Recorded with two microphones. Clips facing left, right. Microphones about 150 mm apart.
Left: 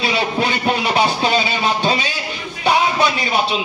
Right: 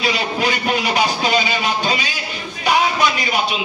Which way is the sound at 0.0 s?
30° left (ahead or behind).